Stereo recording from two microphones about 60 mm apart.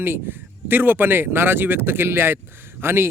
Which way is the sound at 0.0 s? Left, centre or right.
Right.